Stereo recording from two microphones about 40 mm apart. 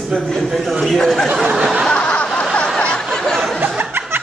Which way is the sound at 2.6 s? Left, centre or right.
Centre.